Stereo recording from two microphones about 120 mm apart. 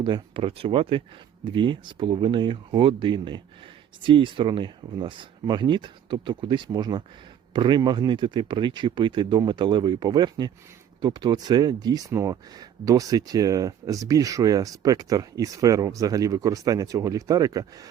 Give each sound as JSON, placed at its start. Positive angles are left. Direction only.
{"t": 0.0, "sound": "speech", "side_deg": -45}